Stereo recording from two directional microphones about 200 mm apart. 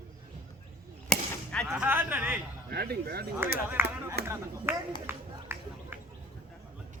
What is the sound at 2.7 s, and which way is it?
Speech, 50° right (ahead or behind).